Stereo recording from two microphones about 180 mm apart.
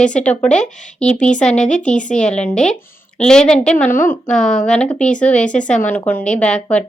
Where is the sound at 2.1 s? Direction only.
5° left (ahead or behind).